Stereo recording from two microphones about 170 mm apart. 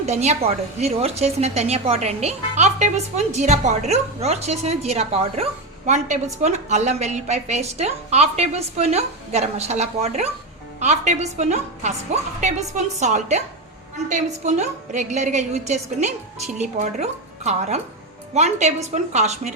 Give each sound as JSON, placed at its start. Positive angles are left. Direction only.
{"t": 0.0, "sound": "a woman's voice", "side_deg": -40}